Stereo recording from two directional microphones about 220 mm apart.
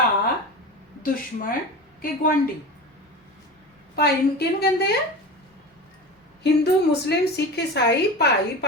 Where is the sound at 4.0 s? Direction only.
45° left (ahead or behind).